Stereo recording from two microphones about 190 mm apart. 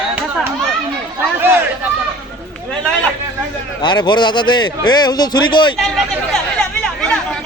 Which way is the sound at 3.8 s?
25° left (ahead or behind).